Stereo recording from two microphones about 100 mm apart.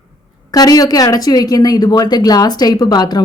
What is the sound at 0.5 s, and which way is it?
A woman's voice, 40° left (ahead or behind).